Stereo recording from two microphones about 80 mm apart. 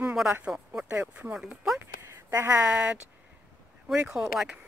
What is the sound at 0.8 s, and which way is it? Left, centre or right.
Speech, centre.